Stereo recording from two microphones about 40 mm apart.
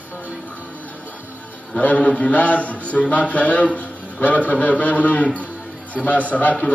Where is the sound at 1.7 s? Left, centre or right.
Left.